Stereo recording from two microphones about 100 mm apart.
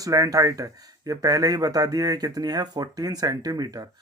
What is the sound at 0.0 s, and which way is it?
Speech, 35° right (ahead or behind).